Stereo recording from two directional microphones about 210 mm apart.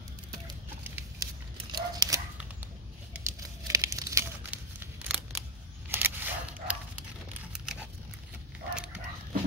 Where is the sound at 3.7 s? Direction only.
15° right (ahead or behind).